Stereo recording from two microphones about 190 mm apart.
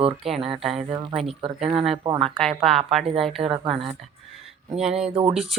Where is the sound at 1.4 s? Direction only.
30° right (ahead or behind).